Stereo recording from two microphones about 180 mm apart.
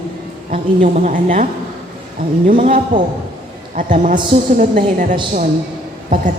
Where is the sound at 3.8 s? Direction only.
45° right (ahead or behind).